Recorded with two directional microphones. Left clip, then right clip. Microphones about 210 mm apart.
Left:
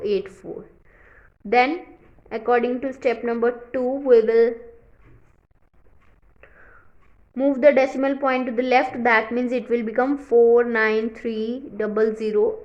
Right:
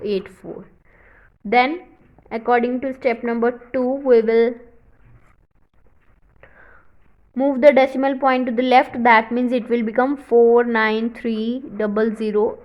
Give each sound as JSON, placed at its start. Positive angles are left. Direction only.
{"t": 0.0, "sound": "a woman's voice", "side_deg": -20}
{"t": 0.9, "sound": "a sound", "side_deg": -20}
{"t": 2.3, "sound": "a woman's voice", "side_deg": -20}
{"t": 6.4, "sound": "whispering", "side_deg": -25}
{"t": 7.3, "sound": "a woman's voice", "side_deg": -20}